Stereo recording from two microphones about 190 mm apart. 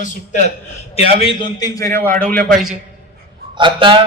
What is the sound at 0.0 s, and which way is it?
A man's voice, 40° left (ahead or behind).